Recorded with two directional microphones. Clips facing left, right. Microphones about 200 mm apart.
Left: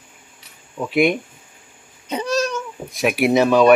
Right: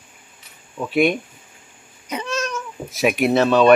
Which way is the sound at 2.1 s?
35° left (ahead or behind).